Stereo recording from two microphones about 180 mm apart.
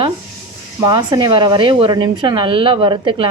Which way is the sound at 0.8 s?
20° right (ahead or behind).